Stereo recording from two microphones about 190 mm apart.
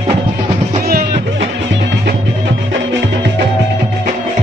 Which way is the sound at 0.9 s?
50° right (ahead or behind).